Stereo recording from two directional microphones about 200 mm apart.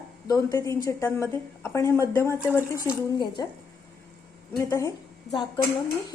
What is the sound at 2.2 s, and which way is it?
Speech, 10° right (ahead or behind).